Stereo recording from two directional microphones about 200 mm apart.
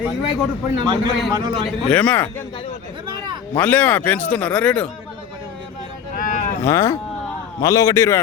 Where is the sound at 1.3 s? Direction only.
20° right (ahead or behind).